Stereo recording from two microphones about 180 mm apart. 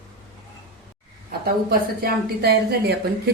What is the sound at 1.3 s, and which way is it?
Speech, 55° right (ahead or behind).